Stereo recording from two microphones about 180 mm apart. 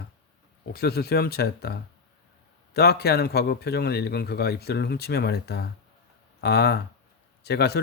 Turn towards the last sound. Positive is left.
turn(degrees=65)  # may be behind; listen again after turning